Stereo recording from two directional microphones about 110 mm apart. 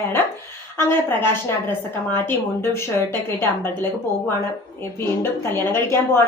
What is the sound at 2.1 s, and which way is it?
A woman's voice, 20° left (ahead or behind).